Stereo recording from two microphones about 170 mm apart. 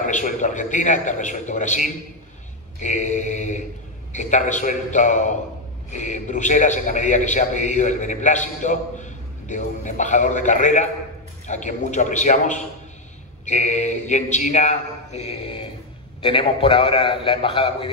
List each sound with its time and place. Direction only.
0.0 s a man's voice: 45° left (ahead or behind); by 17.8 s 30° left (ahead or behind)